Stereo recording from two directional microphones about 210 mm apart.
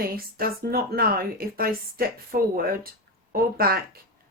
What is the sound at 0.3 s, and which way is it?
Speech, 45° right (ahead or behind).